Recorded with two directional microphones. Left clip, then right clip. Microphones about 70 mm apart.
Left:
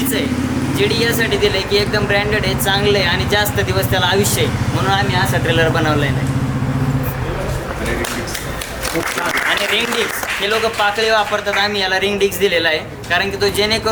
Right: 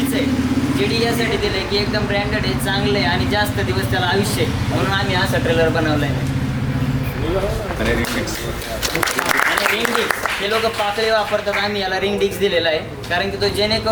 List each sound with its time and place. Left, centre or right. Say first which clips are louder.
1.5 s speech: left 4 dB; centre
10.4 s speech: left 4 dB; centre